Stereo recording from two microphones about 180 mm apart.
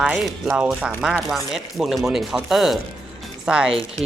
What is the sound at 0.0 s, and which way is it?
Speech, 5° right (ahead or behind).